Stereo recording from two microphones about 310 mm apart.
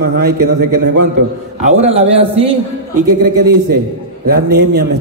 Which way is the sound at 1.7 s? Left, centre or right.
Centre.